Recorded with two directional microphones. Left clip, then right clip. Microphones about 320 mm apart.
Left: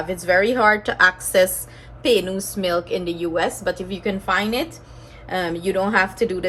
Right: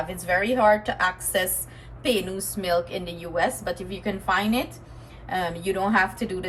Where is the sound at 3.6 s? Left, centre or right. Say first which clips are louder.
Left 6 dB; left.